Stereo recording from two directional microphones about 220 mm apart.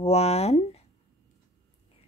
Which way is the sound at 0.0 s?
30° left (ahead or behind).